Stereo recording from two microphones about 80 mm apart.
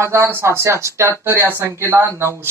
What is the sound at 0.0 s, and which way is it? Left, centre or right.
Speech, right.